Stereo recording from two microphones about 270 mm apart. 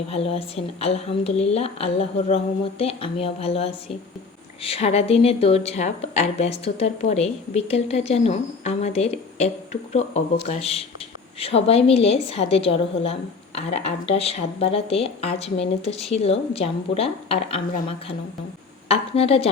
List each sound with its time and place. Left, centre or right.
0.1 s a woman's voice: left